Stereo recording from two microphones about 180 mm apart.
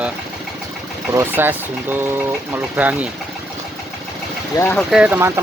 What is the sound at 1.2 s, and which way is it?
Speech, 10° right (ahead or behind).